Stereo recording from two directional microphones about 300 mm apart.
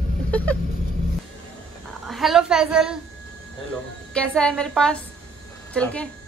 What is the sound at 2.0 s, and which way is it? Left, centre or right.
Speech, centre.